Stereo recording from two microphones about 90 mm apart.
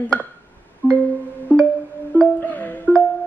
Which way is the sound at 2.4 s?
20° left (ahead or behind).